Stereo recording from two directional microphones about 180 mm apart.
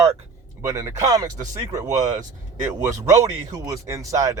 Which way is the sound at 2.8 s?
20° right (ahead or behind).